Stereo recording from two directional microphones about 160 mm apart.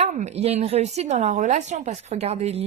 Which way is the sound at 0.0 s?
45° right (ahead or behind).